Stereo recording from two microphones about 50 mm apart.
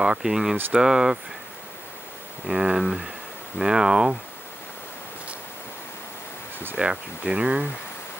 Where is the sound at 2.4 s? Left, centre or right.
Centre.